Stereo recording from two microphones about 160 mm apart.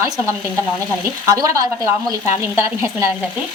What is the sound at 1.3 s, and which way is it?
A woman's voice, 20° right (ahead or behind).